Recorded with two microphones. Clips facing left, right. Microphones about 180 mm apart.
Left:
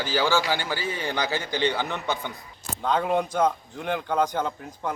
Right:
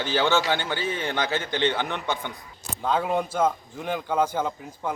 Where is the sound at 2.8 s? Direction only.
5° right (ahead or behind).